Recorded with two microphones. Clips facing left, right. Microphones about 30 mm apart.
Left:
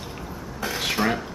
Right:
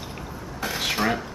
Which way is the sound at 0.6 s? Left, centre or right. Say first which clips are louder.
Even; centre.